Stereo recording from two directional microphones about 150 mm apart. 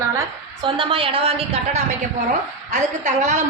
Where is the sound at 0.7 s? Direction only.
35° right (ahead or behind).